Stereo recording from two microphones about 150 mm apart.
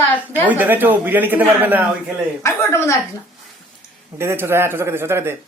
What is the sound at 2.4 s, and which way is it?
Speech, 15° left (ahead or behind).